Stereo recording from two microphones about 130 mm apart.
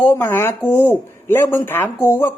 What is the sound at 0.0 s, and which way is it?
Speech, 15° left (ahead or behind).